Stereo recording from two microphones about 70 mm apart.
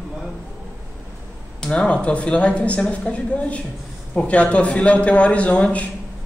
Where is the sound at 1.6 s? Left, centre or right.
Centre.